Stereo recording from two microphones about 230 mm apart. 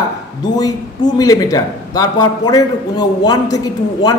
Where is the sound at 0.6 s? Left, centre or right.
Centre.